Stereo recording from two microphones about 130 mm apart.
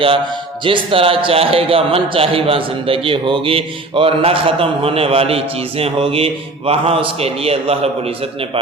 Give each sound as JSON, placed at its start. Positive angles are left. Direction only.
{"t": 0.6, "sound": "speech", "side_deg": -40}